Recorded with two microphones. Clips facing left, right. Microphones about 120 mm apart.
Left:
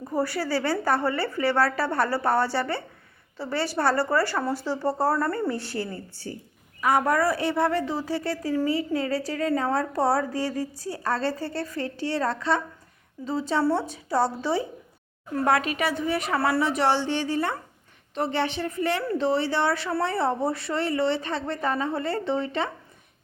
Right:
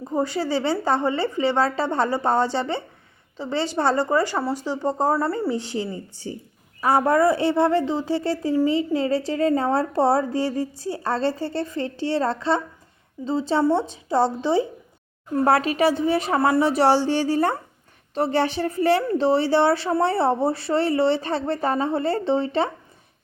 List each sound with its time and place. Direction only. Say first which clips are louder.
0.0 s a woman's voice: right 3 dB; 20° right (ahead or behind)
6.8 s a woman's voice: right 4 dB; 30° right (ahead or behind)